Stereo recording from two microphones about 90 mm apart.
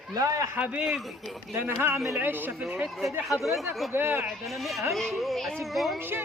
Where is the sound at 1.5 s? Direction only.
25° right (ahead or behind).